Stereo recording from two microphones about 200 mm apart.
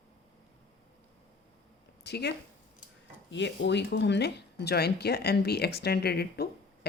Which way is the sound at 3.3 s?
60° left (ahead or behind).